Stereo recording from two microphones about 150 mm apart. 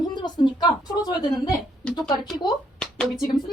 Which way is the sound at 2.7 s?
5° left (ahead or behind).